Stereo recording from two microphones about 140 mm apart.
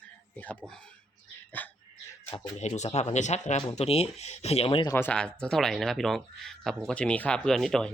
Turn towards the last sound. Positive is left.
turn(degrees=5)  # may be behind; listen again after turning